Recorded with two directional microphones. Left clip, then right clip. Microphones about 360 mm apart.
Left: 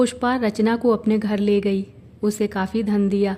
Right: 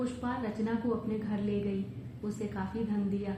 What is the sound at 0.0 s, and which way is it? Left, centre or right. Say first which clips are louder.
A woman's voice: left 15 dB; left.